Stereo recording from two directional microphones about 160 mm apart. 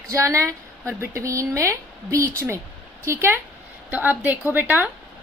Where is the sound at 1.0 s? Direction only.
20° right (ahead or behind).